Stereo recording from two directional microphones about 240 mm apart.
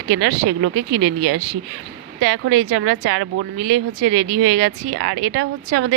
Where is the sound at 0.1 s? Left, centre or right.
Right.